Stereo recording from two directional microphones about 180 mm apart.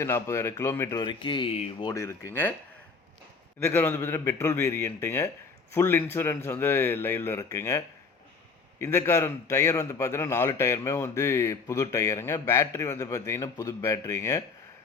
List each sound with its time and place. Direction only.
0.0 s speech: 15° left (ahead or behind); by 1.9 s 35° left (ahead or behind)
1.9 s a man's voice: 15° left (ahead or behind)
3.6 s a man's voice: 15° left (ahead or behind)
8.8 s a man's voice: 15° left (ahead or behind)